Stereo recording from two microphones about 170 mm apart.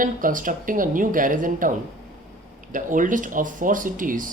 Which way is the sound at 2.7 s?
50° right (ahead or behind).